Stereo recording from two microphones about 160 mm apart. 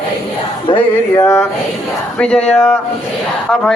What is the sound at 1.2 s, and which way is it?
Speech, 15° left (ahead or behind).